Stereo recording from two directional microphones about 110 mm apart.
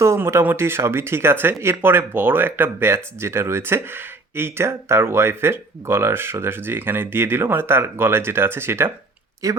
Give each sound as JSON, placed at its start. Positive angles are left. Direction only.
{"t": 0.0, "sound": "speech", "side_deg": -25}